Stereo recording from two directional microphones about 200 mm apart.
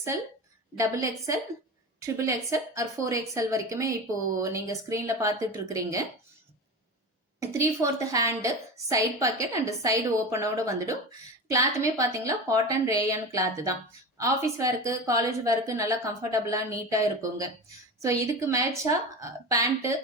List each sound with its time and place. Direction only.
0.8 s a woman's voice: 15° right (ahead or behind)
7.3 s a woman's voice: 15° right (ahead or behind)